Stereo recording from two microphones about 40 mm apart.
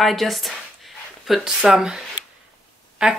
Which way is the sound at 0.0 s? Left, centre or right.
Centre.